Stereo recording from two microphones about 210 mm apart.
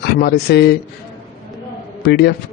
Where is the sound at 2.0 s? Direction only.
50° left (ahead or behind).